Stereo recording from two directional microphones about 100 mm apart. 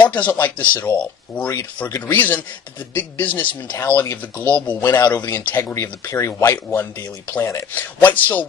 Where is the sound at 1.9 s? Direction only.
20° left (ahead or behind).